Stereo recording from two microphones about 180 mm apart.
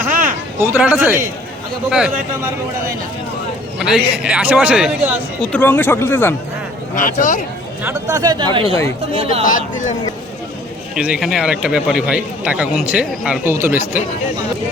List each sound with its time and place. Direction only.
0.6 s a man's voice: 10° right (ahead or behind)
3.8 s speech: centre (ahead or behind)
5.5 s speech: 10° left (ahead or behind)
6.9 s speech: 50° left (ahead or behind)
7.9 s speech: 20° right (ahead or behind)
9.4 s speech: 45° left (ahead or behind)
10.9 s speech: 5° right (ahead or behind)